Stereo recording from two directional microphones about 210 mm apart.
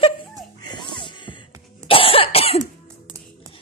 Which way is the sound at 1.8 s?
25° left (ahead or behind).